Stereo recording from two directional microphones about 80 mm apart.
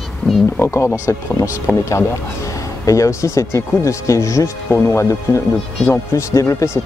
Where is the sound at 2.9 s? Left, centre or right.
Left.